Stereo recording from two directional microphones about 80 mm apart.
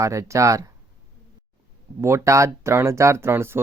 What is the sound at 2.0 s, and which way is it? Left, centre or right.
Speech, right.